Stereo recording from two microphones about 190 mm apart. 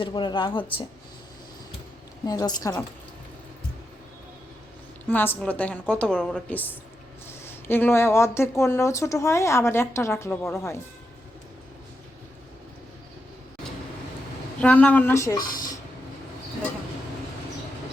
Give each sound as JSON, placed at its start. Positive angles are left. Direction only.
{"t": 0.0, "sound": "speech", "side_deg": 25}
{"t": 2.2, "sound": "speech", "side_deg": 20}
{"t": 5.0, "sound": "speech", "side_deg": 10}
{"t": 14.6, "sound": "speech", "side_deg": 5}